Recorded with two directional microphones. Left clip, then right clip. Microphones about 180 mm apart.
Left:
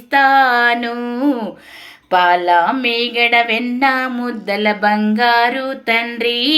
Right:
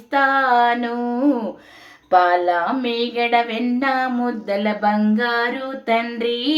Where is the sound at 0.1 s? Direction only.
25° left (ahead or behind).